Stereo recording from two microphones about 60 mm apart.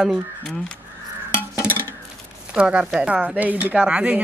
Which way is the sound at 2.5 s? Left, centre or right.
Centre.